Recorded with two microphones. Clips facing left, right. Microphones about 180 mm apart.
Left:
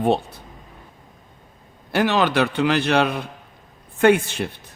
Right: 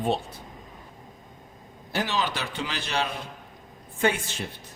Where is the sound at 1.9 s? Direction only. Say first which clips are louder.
Left 9 dB; 65° left (ahead or behind).